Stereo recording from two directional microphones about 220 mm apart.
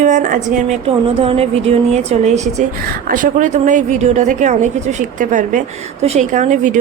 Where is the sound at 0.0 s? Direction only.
35° right (ahead or behind).